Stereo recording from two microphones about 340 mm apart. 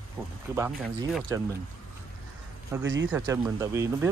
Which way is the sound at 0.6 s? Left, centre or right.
Centre.